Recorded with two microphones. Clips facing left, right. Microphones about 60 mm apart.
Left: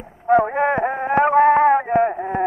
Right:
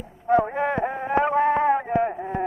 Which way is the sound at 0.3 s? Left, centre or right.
Left.